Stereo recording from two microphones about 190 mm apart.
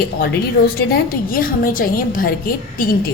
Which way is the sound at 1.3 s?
50° left (ahead or behind).